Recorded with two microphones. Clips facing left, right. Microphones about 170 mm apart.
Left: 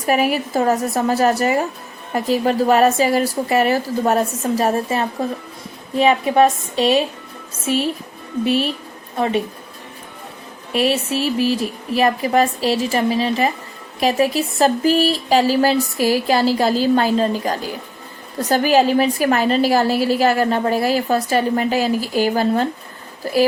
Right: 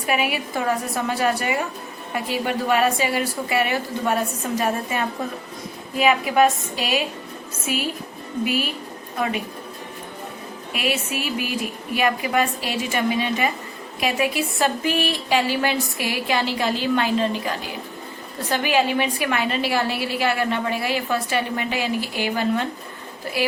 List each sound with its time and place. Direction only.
0.0 s speech: 40° left (ahead or behind)
10.7 s speech: 35° left (ahead or behind)